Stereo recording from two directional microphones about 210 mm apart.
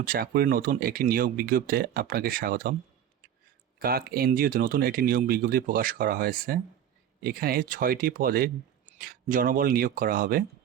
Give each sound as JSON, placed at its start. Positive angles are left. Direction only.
{"t": 0.0, "sound": "speech", "side_deg": -45}
{"t": 3.8, "sound": "speech", "side_deg": -45}